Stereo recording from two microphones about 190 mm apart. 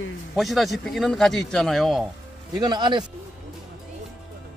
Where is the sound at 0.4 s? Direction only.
Centre (ahead or behind).